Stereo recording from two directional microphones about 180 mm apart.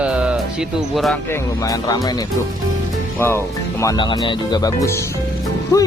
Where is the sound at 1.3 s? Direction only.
20° left (ahead or behind).